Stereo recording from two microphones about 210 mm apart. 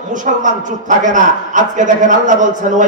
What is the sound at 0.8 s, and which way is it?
Speech, 40° right (ahead or behind).